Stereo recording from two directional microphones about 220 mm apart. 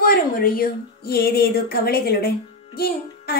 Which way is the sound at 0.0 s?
40° left (ahead or behind).